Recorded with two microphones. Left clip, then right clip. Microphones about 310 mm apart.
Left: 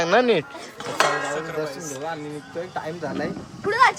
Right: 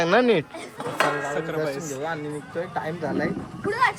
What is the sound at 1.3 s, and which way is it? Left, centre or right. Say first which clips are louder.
Speech: right 1 dB; right.